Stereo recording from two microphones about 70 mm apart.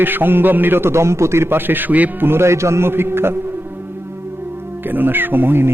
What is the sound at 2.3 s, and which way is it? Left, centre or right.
Speech, right.